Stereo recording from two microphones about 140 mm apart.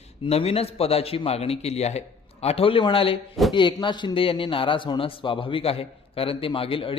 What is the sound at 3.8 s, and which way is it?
A man's voice, 35° left (ahead or behind).